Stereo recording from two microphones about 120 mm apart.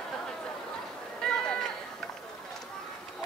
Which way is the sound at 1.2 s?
5° left (ahead or behind).